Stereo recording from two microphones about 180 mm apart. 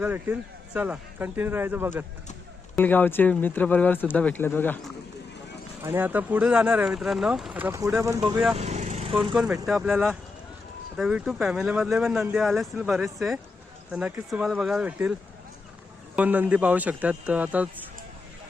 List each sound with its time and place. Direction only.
0.0 s speech: 10° right (ahead or behind)
2.7 s speech: 10° left (ahead or behind)
5.8 s speech: 10° right (ahead or behind)
8.5 s lawn mower: 40° right (ahead or behind)
9.3 s speech: 5° right (ahead or behind)
16.1 s speech: 10° right (ahead or behind)